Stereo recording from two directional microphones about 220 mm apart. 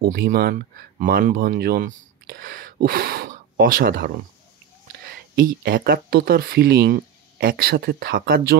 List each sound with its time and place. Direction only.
0.0 s speech: 45° right (ahead or behind)